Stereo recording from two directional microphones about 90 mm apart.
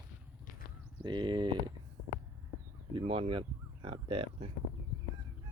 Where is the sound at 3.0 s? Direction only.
90° right.